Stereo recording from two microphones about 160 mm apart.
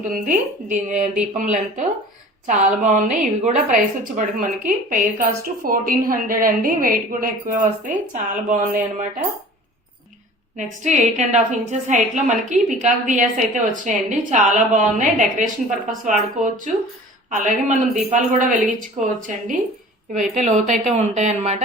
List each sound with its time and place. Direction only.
0.0 s a woman's voice: 55° right (ahead or behind)
10.6 s a woman's voice: 50° right (ahead or behind)